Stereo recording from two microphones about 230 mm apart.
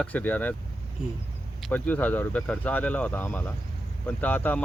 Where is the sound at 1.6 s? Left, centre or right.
Centre.